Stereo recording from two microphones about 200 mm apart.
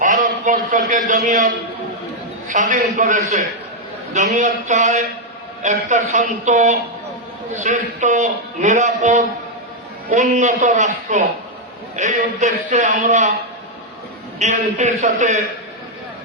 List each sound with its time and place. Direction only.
0.0 s a sound: 40° right (ahead or behind)
2.5 s a man's voice: 40° right (ahead or behind)
14.3 s a man's voice: 35° right (ahead or behind)